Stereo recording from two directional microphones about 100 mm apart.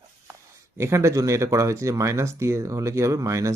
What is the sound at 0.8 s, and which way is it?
Speech, 25° right (ahead or behind).